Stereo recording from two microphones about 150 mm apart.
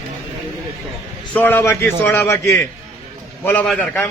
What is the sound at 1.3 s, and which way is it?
A man's voice, 15° left (ahead or behind).